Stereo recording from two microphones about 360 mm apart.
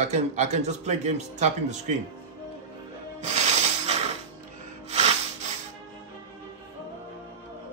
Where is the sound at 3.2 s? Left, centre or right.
Centre.